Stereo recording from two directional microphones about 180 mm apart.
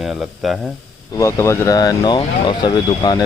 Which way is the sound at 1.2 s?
15° left (ahead or behind).